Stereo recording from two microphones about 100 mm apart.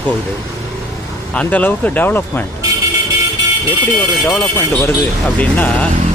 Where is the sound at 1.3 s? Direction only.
15° left (ahead or behind).